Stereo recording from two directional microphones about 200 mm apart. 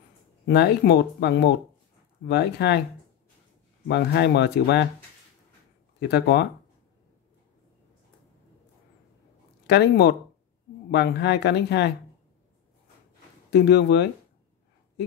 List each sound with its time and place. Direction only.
0.5 s speech: 55° left (ahead or behind)
3.8 s speech: 55° left (ahead or behind)
5.9 s speech: 55° left (ahead or behind)
9.7 s speech: 55° left (ahead or behind)
13.5 s speech: 55° left (ahead or behind)